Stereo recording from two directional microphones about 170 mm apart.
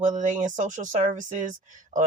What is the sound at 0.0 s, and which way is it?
Speech, 45° right (ahead or behind).